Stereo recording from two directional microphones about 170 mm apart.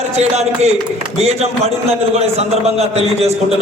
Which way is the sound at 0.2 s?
40° right (ahead or behind).